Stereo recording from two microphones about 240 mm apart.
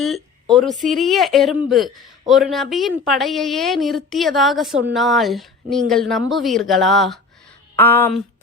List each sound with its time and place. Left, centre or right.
0.0 s a woman's voice: centre